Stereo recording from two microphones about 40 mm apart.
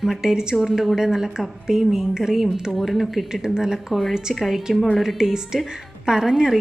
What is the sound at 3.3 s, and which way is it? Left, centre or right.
A woman's voice, centre.